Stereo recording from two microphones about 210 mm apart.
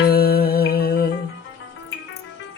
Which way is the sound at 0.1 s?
45° left (ahead or behind).